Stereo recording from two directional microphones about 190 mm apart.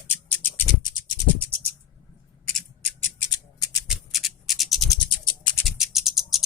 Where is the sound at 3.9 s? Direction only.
Centre (ahead or behind).